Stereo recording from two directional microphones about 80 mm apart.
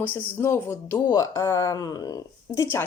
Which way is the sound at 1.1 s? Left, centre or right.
Left.